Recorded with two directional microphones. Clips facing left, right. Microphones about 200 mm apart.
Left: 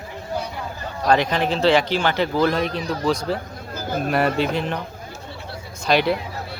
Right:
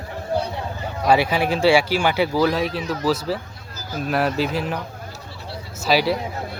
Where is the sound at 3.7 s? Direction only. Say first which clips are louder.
Left 4 dB; 55° left (ahead or behind).